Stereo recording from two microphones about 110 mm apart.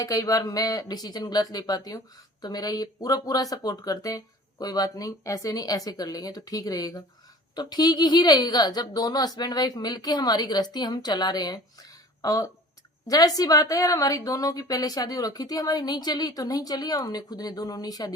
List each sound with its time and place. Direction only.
0.0 s a woman's voice: 30° left (ahead or behind)